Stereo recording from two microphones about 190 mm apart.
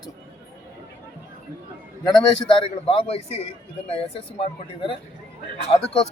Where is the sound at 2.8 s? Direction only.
30° left (ahead or behind).